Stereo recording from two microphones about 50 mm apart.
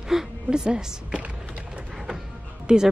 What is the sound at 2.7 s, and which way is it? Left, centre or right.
Speech, centre.